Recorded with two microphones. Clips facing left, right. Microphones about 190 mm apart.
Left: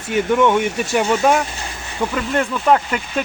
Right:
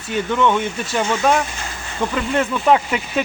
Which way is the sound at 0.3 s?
15° left (ahead or behind).